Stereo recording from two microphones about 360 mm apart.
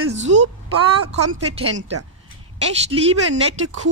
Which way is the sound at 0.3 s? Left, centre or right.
Right.